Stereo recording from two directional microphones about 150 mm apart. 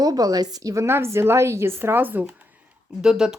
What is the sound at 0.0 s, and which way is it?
A woman's voice, 25° right (ahead or behind).